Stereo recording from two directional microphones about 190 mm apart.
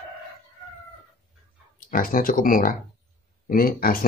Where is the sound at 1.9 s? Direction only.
45° left (ahead or behind).